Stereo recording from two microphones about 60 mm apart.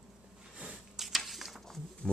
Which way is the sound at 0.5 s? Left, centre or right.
Right.